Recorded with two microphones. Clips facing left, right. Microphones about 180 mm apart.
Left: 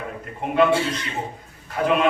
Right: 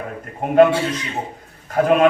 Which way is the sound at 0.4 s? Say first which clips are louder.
Right 4 dB; 45° right (ahead or behind).